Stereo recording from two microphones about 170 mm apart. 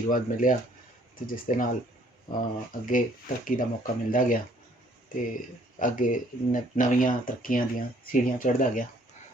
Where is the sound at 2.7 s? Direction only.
55° left (ahead or behind).